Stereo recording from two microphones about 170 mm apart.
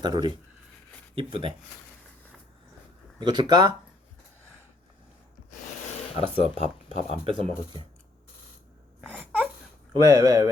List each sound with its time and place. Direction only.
0.0 s speech: 25° right (ahead or behind)
3.2 s speech: 25° right (ahead or behind)
6.1 s speech: 35° right (ahead or behind)
9.0 s wail: 5° right (ahead or behind)
9.9 s speech: 15° right (ahead or behind)